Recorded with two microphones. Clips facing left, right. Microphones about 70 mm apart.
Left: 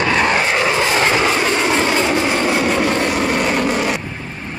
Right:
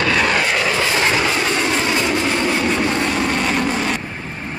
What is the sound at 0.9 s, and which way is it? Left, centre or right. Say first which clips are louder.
Train: left 2 dB; left.